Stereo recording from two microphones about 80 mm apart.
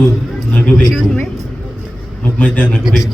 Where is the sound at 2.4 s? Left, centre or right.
Centre.